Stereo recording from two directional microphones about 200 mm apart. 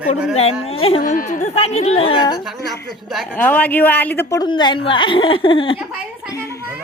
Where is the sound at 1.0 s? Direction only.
40° left (ahead or behind); by 2.3 s 25° left (ahead or behind).